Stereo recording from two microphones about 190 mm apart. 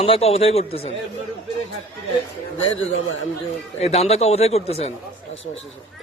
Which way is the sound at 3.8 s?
35° left (ahead or behind).